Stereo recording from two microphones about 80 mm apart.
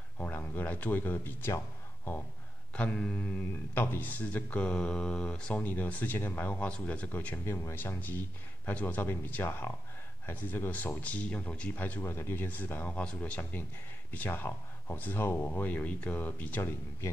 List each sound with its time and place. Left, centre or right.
0.2 s speech: left
2.7 s speech: centre
12.0 s speech: left